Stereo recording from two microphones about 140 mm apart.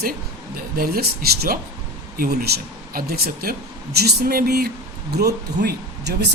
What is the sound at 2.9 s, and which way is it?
Speech, 90° right.